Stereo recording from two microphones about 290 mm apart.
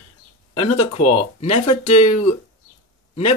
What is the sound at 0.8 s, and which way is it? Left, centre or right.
Speech, left.